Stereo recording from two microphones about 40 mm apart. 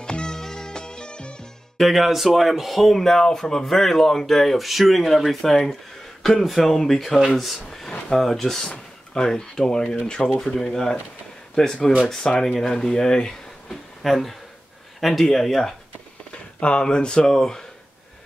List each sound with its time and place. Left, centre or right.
0.0 s music: centre
1.8 s speech: centre
3.0 s speech: centre
10.4 s speech: centre
14.0 s speech: centre
16.5 s speech: left